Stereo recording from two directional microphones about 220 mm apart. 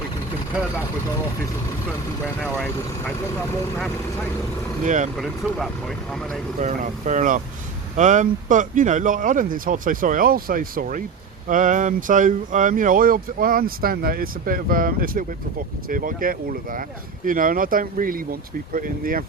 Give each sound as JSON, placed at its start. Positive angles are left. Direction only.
{"t": 4.8, "sound": "speech", "side_deg": -35}
{"t": 5.1, "sound": "speech", "side_deg": 0}
{"t": 6.6, "sound": "speech", "side_deg": -35}